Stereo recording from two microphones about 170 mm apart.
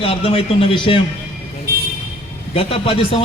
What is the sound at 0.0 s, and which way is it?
A man's voice, 35° left (ahead or behind).